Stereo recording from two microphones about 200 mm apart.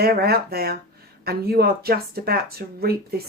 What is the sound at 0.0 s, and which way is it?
Speech, 50° right (ahead or behind).